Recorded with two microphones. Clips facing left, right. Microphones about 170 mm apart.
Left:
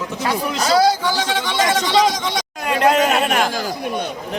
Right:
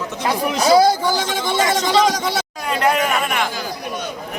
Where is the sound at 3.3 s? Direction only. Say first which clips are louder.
Left 4 dB; 45° left (ahead or behind).